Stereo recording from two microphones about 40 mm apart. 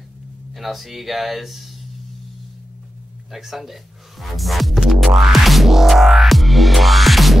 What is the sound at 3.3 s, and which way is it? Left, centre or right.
Speech, centre.